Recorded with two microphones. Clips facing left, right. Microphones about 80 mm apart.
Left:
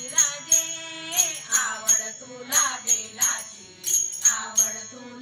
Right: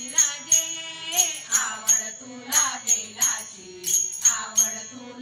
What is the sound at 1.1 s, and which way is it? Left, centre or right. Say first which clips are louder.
Jingle bell: right 1 dB; left.